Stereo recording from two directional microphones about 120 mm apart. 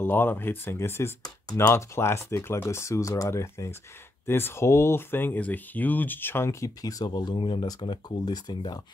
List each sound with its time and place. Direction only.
0.0 s speech: 15° left (ahead or behind)
1.2 s speech: 30° left (ahead or behind)
1.7 s speech: 20° left (ahead or behind)